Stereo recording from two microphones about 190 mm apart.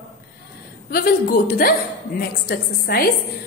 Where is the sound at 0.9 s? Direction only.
50° left (ahead or behind).